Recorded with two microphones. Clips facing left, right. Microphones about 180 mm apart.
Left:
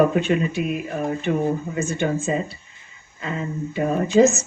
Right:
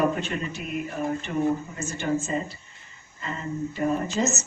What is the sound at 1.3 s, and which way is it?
Speech, 65° left (ahead or behind).